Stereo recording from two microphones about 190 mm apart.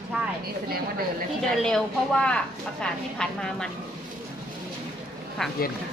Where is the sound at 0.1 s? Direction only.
5° right (ahead or behind).